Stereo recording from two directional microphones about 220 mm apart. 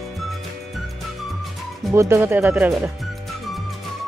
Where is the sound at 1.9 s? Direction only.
10° right (ahead or behind).